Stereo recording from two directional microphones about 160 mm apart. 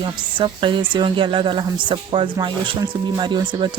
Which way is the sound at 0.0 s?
30° right (ahead or behind).